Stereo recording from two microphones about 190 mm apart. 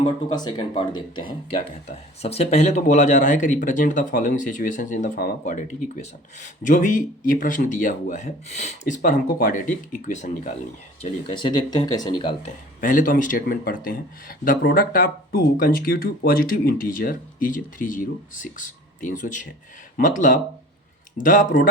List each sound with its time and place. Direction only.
0.0 s speech: 20° left (ahead or behind)
1.9 s speech: 35° left (ahead or behind)
9.0 s speech: 45° left (ahead or behind)
11.0 s speech: 25° left (ahead or behind)
12.4 s speech: 45° left (ahead or behind)